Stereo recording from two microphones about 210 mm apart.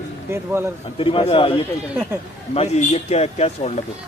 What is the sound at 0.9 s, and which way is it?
A man's voice, 25° left (ahead or behind).